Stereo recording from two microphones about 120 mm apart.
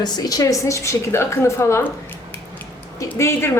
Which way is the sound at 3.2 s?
25° left (ahead or behind).